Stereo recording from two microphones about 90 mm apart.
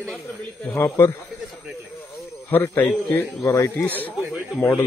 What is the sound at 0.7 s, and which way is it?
Speech, 30° left (ahead or behind).